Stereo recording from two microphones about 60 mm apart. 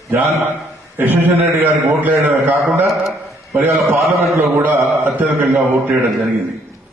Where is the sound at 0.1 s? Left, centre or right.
Right.